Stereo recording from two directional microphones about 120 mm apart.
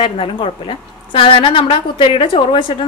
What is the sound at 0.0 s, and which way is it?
A woman's voice, 50° left (ahead or behind).